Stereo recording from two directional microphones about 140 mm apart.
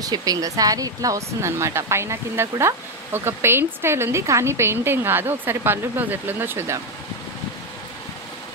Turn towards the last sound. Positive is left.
turn(degrees=-20)  # may be behind; listen again after turning